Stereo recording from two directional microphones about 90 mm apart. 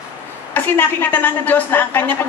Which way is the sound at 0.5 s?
20° left (ahead or behind).